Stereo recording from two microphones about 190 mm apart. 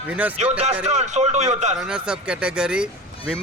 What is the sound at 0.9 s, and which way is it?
Speech, 35° right (ahead or behind).